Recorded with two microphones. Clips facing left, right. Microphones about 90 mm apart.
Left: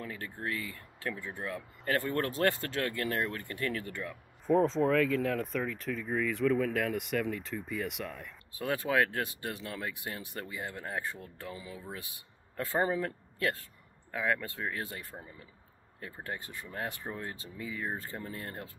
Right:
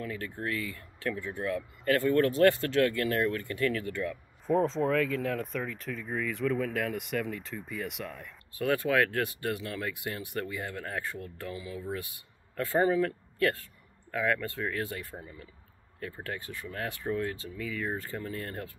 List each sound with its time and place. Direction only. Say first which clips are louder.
0.0 s speech: right 3 dB; 25° left (ahead or behind)
4.5 s speech: even; centre (ahead or behind)
8.5 s speech: right 3 dB; 25° left (ahead or behind)